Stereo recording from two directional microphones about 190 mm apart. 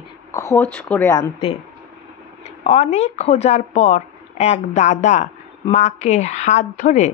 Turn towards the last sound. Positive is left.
turn(degrees=40)  # may be behind; listen again after turning